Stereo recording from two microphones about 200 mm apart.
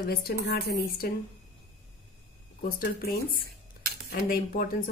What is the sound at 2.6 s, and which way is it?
A woman's voice, 50° left (ahead or behind).